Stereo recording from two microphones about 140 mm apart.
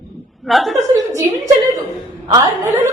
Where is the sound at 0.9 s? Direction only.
25° right (ahead or behind).